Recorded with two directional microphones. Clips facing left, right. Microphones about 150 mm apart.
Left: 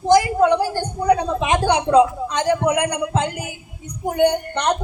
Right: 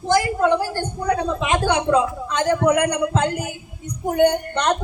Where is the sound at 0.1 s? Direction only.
15° left (ahead or behind).